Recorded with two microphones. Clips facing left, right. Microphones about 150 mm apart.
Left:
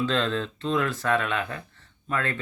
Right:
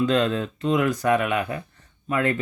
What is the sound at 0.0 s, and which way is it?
A man's voice, 15° right (ahead or behind).